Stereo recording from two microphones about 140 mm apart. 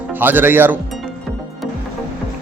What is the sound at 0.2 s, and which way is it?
Speech, 15° right (ahead or behind).